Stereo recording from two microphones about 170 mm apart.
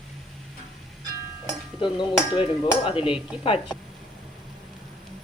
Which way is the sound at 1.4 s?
30° left (ahead or behind).